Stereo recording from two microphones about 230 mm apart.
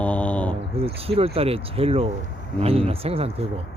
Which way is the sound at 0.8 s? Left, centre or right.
Right.